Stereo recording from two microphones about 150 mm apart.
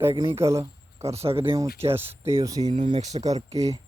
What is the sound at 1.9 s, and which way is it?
Speech, 15° right (ahead or behind).